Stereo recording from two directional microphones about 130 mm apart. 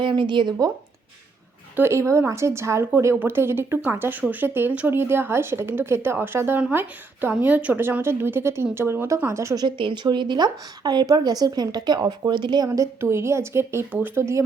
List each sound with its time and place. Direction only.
0.0 s speech: 40° right (ahead or behind)
1.7 s speech: 20° right (ahead or behind)
9.6 s speech: 40° right (ahead or behind); by 14.4 s 20° right (ahead or behind)